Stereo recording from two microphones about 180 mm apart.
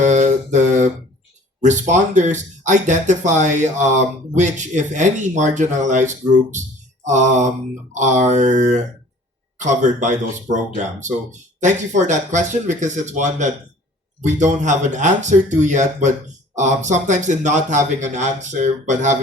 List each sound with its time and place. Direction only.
0.0 s mantra: 40° right (ahead or behind)
1.6 s speech: 40° right (ahead or behind)